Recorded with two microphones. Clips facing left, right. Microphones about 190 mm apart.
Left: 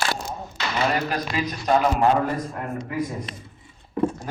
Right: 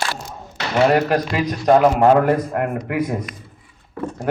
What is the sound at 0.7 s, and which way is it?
A man's voice, 65° right (ahead or behind).